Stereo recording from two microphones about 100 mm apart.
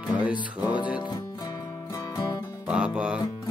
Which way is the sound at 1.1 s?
40° left (ahead or behind).